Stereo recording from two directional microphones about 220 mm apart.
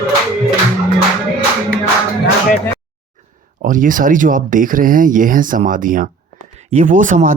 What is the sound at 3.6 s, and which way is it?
Speech, 35° right (ahead or behind).